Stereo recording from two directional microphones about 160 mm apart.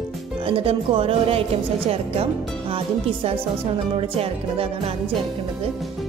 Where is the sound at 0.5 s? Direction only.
35° right (ahead or behind).